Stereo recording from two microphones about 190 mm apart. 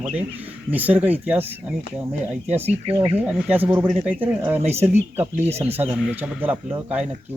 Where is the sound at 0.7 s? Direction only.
10° right (ahead or behind).